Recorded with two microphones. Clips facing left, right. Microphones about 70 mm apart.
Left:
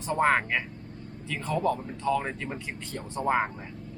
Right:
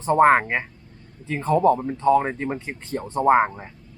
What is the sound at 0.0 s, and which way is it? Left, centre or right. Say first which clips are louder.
A man's voice: right 8 dB; right.